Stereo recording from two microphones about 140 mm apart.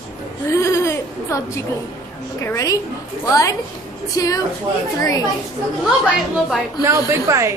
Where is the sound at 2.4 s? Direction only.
20° left (ahead or behind).